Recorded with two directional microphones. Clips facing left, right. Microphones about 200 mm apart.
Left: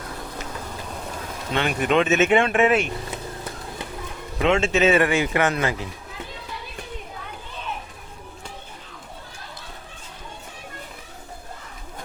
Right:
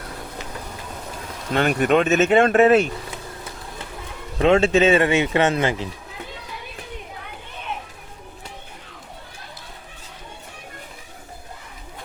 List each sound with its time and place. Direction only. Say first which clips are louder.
1.5 s speech: right 3 dB; 45° right (ahead or behind)
4.4 s speech: right 4 dB; 35° right (ahead or behind)